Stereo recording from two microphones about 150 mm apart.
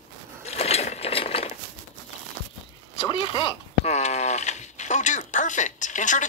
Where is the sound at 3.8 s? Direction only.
50° left (ahead or behind).